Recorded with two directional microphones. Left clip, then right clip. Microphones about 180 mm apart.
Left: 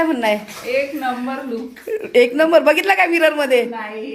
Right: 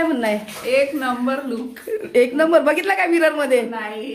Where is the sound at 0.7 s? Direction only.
20° right (ahead or behind).